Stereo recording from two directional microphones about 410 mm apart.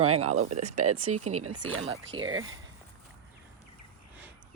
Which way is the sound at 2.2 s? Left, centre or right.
Right.